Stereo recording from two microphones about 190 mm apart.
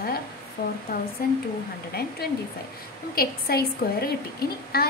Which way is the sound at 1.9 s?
55° left (ahead or behind).